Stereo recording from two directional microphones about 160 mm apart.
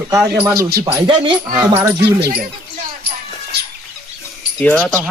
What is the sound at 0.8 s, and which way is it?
Speech, 25° right (ahead or behind).